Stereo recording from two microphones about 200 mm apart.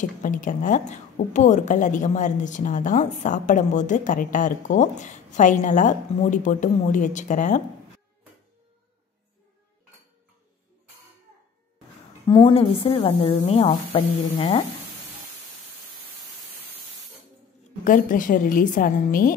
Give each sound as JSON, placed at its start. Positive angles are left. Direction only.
{"t": 0.2, "sound": "a woman's voice", "side_deg": 40}
{"t": 12.3, "sound": "a woman's voice", "side_deg": 25}
{"t": 17.8, "sound": "a woman's voice", "side_deg": 40}